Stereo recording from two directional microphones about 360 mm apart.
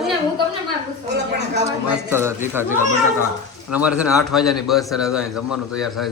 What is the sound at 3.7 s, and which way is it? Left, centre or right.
A man's voice, centre.